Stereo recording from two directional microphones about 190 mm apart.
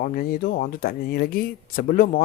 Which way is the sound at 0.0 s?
45° left (ahead or behind).